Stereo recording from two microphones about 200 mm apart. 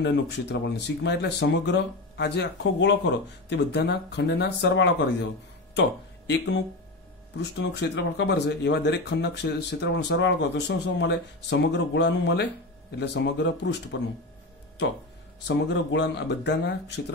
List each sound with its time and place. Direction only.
0.0 s speech: 60° left (ahead or behind)
15.4 s speech: 60° left (ahead or behind)